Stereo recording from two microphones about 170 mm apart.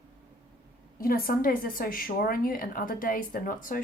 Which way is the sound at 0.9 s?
60° left (ahead or behind).